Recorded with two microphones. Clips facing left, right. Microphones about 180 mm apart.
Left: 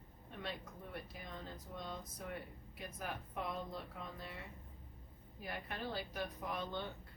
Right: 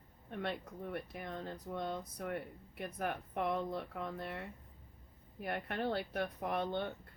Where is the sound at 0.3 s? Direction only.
60° right (ahead or behind).